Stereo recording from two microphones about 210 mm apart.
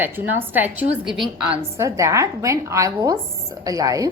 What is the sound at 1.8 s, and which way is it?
A woman's voice, 15° right (ahead or behind).